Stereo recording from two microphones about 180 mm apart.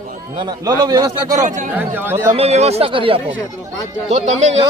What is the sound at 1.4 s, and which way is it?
Speech, 40° right (ahead or behind).